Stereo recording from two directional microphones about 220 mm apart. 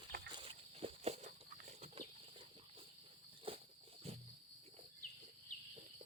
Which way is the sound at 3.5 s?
25° right (ahead or behind).